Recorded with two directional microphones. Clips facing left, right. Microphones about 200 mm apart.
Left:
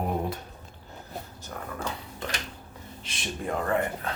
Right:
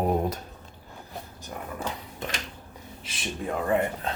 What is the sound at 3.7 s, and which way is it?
Speech, 20° right (ahead or behind).